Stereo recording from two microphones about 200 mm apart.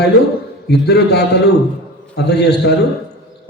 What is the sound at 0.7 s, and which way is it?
A man's voice, 55° left (ahead or behind).